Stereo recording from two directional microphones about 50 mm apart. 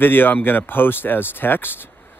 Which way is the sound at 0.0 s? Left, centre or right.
Left.